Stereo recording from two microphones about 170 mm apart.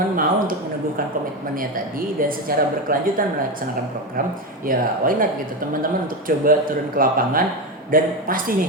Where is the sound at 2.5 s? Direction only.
60° right (ahead or behind).